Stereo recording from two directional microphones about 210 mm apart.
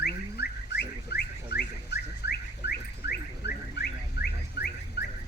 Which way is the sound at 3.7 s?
50° left (ahead or behind).